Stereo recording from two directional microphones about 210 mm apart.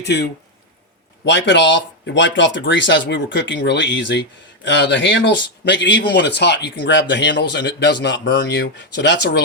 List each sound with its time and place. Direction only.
0.0 s speech: 55° left (ahead or behind)